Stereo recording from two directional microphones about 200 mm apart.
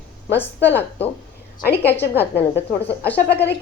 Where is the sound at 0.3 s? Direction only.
10° left (ahead or behind).